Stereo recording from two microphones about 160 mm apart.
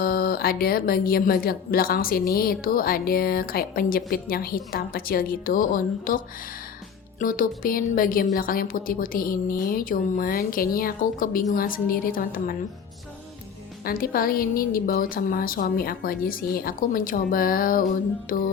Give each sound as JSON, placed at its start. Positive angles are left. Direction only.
{"t": 0.0, "sound": "a woman's voice", "side_deg": 65}
{"t": 13.8, "sound": "a woman's voice", "side_deg": 65}